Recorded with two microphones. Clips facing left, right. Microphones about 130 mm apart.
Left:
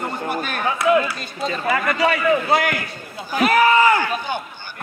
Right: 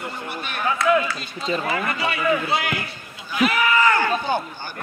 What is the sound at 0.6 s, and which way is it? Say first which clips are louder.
Speech: left 1 dB; 25° left (ahead or behind).